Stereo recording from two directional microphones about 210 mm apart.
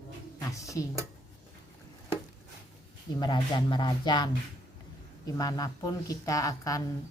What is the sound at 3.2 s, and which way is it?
Speech, 20° left (ahead or behind).